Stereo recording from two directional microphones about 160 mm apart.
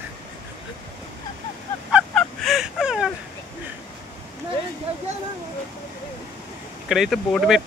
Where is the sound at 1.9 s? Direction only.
Centre (ahead or behind).